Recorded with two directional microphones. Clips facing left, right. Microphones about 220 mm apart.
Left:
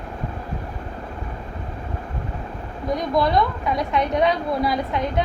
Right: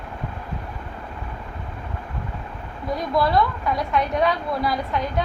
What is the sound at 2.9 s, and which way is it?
A woman's voice, 20° left (ahead or behind).